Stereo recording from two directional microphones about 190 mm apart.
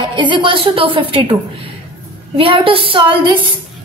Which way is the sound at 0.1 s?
25° right (ahead or behind).